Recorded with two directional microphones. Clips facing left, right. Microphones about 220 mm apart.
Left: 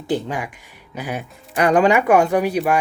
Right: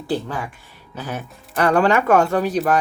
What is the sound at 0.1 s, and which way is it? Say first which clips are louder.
Speech: left 2 dB; 15° left (ahead or behind).